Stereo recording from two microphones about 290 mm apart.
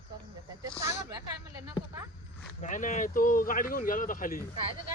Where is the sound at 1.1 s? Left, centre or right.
Centre.